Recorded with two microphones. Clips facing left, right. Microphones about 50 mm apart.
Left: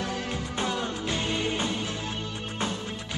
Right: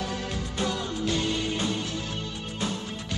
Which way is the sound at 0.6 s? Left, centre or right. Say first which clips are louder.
Right 1 dB; left.